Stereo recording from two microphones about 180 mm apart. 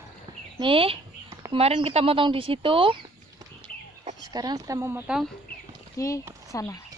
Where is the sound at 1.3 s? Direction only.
20° right (ahead or behind).